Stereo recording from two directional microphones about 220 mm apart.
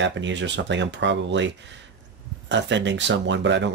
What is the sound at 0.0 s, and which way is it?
Speech, 55° right (ahead or behind).